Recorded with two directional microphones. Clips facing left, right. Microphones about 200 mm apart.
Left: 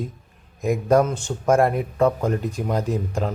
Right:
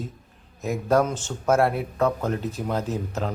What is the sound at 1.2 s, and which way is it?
Speech, 15° left (ahead or behind).